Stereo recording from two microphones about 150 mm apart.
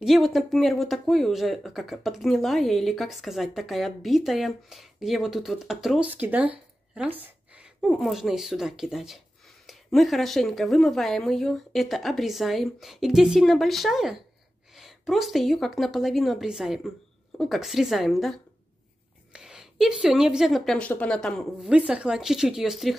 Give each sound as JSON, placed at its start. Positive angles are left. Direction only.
{"t": 0.0, "sound": "speech", "side_deg": 0}
{"t": 21.6, "sound": "speech", "side_deg": -5}